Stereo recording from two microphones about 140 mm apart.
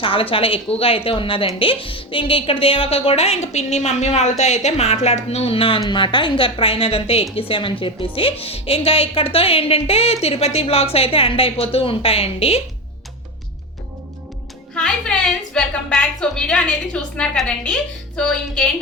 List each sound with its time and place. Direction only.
0.0 s a woman's voice: 40° left (ahead or behind)
14.8 s a woman's voice: 5° left (ahead or behind)